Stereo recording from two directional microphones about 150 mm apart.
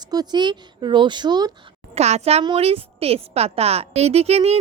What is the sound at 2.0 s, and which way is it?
A child's voice, 45° right (ahead or behind).